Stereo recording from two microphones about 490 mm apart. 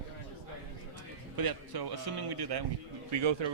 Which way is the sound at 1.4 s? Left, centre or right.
Right.